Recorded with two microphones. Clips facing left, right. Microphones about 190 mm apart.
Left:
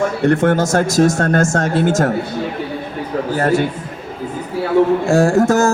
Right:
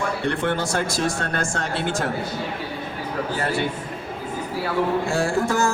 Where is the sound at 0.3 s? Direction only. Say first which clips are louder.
Left 11 dB; 45° left (ahead or behind).